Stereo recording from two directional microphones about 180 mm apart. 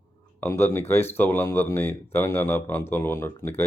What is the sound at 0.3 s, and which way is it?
Speech, 10° left (ahead or behind).